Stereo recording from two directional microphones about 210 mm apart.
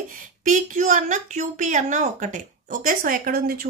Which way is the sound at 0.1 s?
40° right (ahead or behind).